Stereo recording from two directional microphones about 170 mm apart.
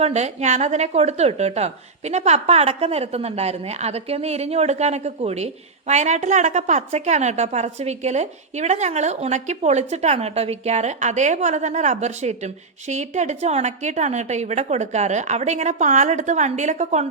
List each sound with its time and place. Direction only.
0.0 s a woman's voice: 40° right (ahead or behind)